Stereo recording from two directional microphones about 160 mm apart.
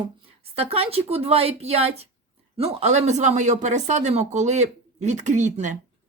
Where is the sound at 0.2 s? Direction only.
40° right (ahead or behind).